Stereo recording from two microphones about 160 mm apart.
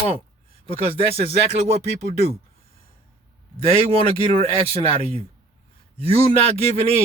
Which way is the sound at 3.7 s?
35° right (ahead or behind).